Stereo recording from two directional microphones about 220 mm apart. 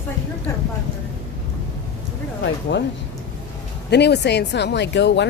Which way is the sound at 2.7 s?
55° left (ahead or behind).